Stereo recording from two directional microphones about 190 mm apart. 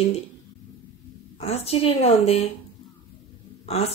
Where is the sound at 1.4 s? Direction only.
35° left (ahead or behind).